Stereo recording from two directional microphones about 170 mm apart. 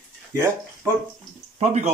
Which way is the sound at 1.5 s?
40° right (ahead or behind).